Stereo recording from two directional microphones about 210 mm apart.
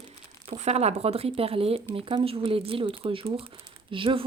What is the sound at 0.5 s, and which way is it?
Speech, 30° right (ahead or behind).